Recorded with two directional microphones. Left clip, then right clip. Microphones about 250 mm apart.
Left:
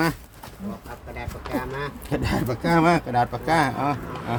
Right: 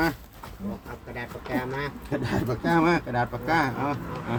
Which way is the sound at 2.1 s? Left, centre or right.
Left.